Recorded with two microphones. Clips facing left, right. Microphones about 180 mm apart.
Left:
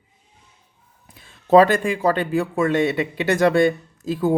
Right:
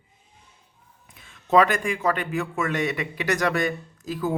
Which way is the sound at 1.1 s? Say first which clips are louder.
Left 6 dB; 35° left (ahead or behind).